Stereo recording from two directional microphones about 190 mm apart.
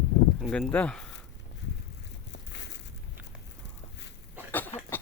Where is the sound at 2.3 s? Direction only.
70° left (ahead or behind).